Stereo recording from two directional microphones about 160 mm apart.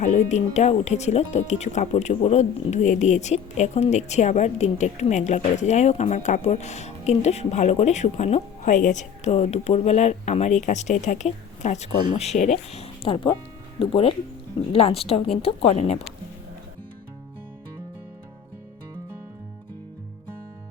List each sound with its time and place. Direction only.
0.0 s speech: 45° left (ahead or behind)